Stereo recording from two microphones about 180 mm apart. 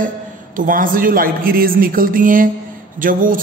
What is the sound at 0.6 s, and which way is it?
A man's voice, 50° right (ahead or behind).